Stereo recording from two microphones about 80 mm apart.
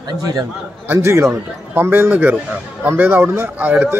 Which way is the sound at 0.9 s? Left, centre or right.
Right.